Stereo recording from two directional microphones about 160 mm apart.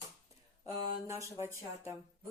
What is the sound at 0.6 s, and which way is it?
Speech, 20° right (ahead or behind).